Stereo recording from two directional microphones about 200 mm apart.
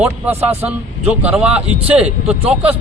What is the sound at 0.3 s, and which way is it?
Speech, 10° right (ahead or behind).